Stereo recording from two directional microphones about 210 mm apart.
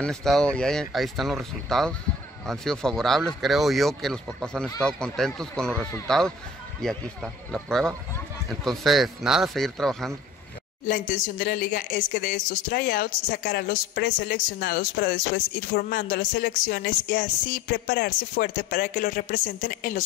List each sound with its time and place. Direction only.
0.0 s speech: centre (ahead or behind)
7.5 s speech: centre (ahead or behind)
10.9 s speech: 40° left (ahead or behind)